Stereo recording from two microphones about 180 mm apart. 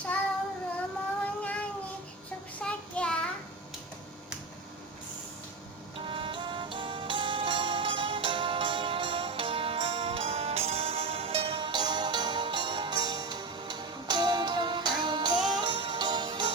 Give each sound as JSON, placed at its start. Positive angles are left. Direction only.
{"t": 1.2, "sound": "child singing", "side_deg": 5}
{"t": 6.1, "sound": "music", "side_deg": -30}